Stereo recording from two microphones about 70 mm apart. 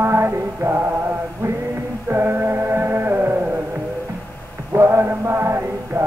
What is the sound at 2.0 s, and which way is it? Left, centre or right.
Music, right.